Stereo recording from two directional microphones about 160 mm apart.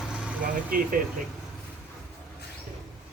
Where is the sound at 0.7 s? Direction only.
60° right (ahead or behind).